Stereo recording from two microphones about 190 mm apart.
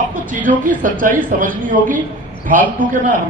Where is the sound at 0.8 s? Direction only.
45° right (ahead or behind).